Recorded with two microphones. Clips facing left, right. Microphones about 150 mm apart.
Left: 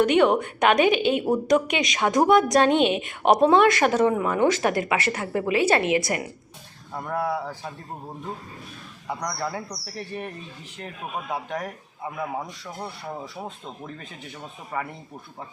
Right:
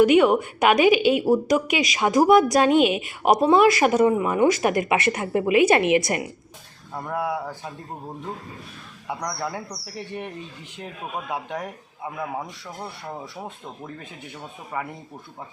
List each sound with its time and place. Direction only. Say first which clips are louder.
0.0 s a woman's voice: right 3 dB; 5° right (ahead or behind)
6.9 s speech: even; 5° right (ahead or behind)
9.0 s a woman's voice: even; 5° right (ahead or behind)
13.7 s a woman's voice: right 1 dB; 15° right (ahead or behind)
14.7 s speech: even; 5° right (ahead or behind)